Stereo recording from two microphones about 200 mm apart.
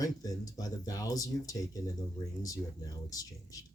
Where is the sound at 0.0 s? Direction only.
20° left (ahead or behind).